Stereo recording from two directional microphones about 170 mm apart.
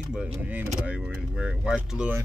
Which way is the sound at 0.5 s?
10° right (ahead or behind).